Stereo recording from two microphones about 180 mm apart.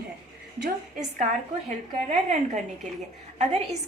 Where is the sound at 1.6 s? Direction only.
40° right (ahead or behind).